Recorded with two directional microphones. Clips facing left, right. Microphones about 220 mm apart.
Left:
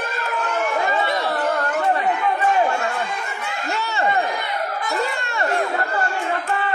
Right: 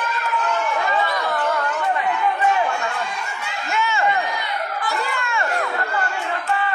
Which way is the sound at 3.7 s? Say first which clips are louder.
Right 2 dB; 35° left (ahead or behind).